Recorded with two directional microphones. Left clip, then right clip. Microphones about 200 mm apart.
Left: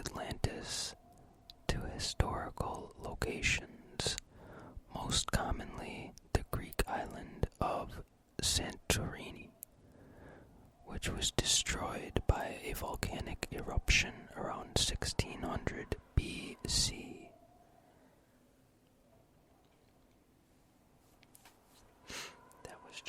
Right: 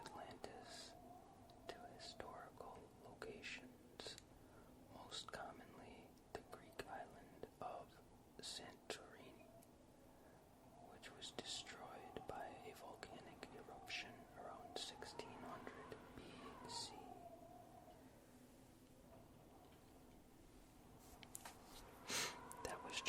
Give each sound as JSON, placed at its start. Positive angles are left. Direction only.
{"t": 0.0, "sound": "whispering", "side_deg": 35}
{"t": 11.0, "sound": "whispering", "side_deg": 35}
{"t": 22.0, "sound": "whispering", "side_deg": 0}